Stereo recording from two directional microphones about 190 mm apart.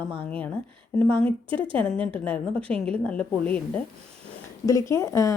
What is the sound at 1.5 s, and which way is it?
Speech, 25° right (ahead or behind).